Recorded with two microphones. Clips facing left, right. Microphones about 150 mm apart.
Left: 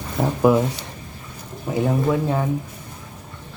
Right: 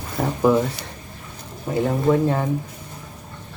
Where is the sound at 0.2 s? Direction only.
10° left (ahead or behind).